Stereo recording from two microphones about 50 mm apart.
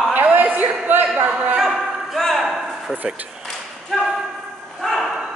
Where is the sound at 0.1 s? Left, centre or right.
Right.